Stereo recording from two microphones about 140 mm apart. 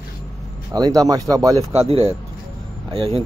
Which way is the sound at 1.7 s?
45° right (ahead or behind).